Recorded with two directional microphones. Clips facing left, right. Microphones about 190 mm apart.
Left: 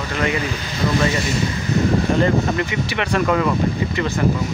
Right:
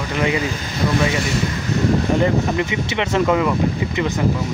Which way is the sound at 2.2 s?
20° right (ahead or behind).